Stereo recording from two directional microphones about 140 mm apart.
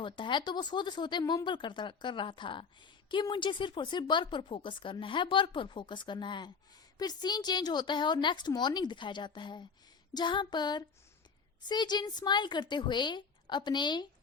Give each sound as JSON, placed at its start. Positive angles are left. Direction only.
{"t": 0.0, "sound": "speech", "side_deg": 35}